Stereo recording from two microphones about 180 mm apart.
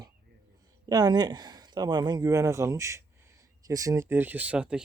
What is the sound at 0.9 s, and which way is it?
Speech, 20° right (ahead or behind).